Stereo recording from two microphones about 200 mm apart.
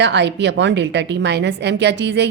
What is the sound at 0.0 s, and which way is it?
A woman's voice, 60° right (ahead or behind).